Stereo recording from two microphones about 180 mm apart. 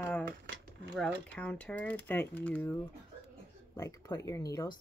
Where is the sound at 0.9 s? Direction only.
5° left (ahead or behind); by 4.7 s 20° left (ahead or behind).